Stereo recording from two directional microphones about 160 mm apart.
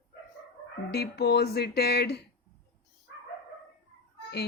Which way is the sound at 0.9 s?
90° left.